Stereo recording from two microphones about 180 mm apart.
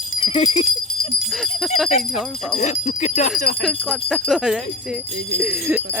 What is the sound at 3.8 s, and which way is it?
Speech, centre (ahead or behind).